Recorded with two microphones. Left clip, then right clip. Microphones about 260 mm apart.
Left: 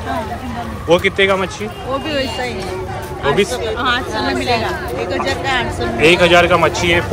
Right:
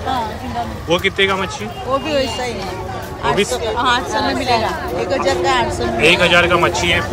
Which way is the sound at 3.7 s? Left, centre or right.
Right.